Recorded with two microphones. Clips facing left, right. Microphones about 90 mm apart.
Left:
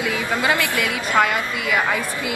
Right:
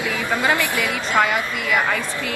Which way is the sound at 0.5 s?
15° right (ahead or behind).